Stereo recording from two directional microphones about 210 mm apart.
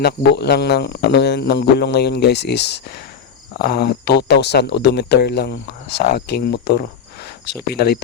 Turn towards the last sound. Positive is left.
turn(degrees=50)  # may be behind; listen again after turning